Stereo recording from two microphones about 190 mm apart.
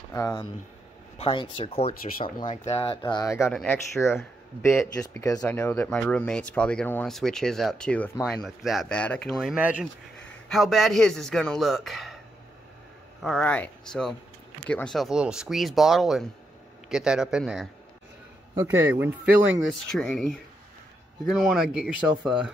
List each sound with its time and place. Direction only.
0.1 s a man's voice: 20° left (ahead or behind)
1.1 s speech: 30° left (ahead or behind)
2.1 s a man's voice: 45° left (ahead or behind); by 12.2 s centre (ahead or behind)
13.2 s speech: 5° left (ahead or behind)
19.7 s speech: 5° left (ahead or behind)